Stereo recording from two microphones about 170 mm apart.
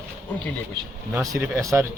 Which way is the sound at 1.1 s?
15° right (ahead or behind).